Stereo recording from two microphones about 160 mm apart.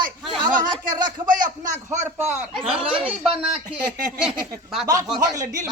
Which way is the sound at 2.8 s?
35° right (ahead or behind).